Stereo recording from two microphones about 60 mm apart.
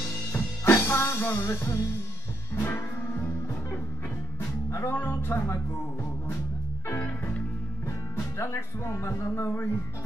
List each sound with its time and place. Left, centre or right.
0.7 s music: left
4.9 s music: left
8.4 s speech: left